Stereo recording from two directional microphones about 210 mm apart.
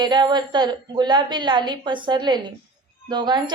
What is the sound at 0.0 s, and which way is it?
A child's voice, 20° right (ahead or behind).